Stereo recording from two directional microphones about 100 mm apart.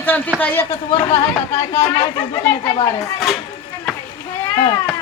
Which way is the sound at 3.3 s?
5° right (ahead or behind).